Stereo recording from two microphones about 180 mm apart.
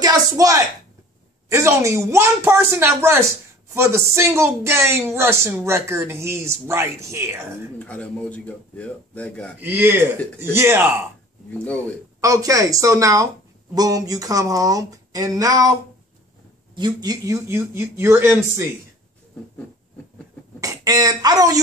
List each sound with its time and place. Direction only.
0.0 s a woman's voice: 20° right (ahead or behind)
7.8 s speech: 5° left (ahead or behind)
9.6 s speech: 10° right (ahead or behind)
11.5 s speech: 10° left (ahead or behind)
12.2 s speech: 20° right (ahead or behind)
16.7 s speech: 25° right (ahead or behind)
20.6 s speech: 20° right (ahead or behind)